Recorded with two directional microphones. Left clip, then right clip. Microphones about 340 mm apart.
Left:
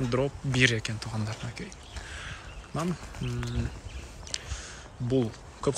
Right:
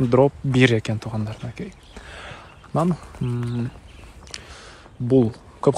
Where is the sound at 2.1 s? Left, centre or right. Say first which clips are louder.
Right 4 dB; centre.